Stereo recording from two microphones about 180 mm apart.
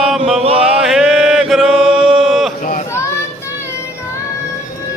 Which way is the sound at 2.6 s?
45° left (ahead or behind).